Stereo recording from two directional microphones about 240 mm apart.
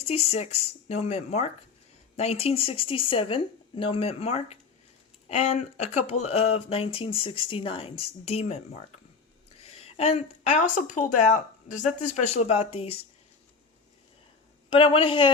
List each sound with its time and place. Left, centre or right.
0.3 s speech: left
14.7 s speech: left